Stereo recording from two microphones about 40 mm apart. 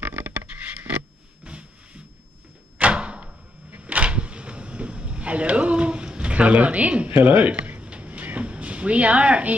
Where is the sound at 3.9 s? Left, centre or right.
Right.